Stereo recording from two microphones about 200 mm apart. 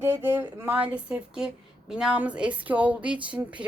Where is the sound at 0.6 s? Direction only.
10° right (ahead or behind).